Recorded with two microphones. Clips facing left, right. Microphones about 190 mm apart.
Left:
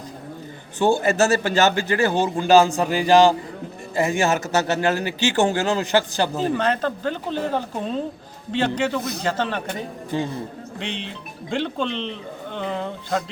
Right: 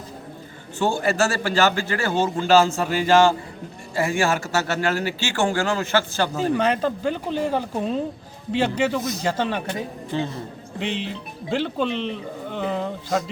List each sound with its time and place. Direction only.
0.8 s a man's voice: 15° left (ahead or behind)
6.3 s speech: 10° right (ahead or behind)
10.8 s speech: 5° right (ahead or behind)